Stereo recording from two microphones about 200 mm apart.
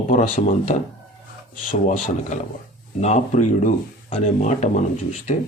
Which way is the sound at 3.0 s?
35° left (ahead or behind).